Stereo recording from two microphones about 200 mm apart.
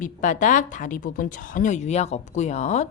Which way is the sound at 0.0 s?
40° left (ahead or behind).